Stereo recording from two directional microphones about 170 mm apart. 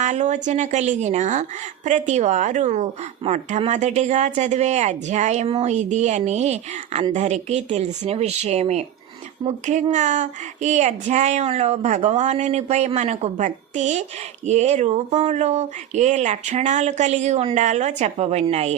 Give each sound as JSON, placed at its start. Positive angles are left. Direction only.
{"t": 0.0, "sound": "a woman's voice", "side_deg": -45}
{"t": 9.9, "sound": "speech", "side_deg": -45}